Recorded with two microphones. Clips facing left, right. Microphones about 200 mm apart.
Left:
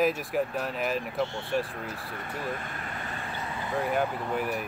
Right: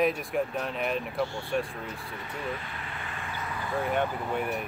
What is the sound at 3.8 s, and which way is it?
Speech, centre (ahead or behind).